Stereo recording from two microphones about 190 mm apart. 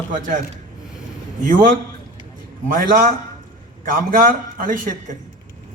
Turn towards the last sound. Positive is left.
turn(degrees=-45)  # may be behind; listen again after turning